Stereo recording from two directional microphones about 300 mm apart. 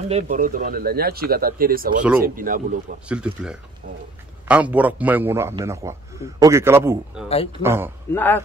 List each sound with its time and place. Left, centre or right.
0.1 s speech: right
3.1 s a man's voice: centre
7.2 s speech: centre
7.6 s a man's voice: centre
8.1 s speech: centre